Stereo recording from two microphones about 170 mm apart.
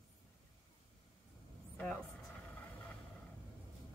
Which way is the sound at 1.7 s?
5° left (ahead or behind).